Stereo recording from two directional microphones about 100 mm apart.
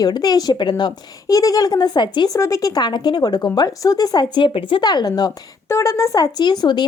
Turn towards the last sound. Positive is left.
turn(degrees=45)  # may be behind; listen again after turning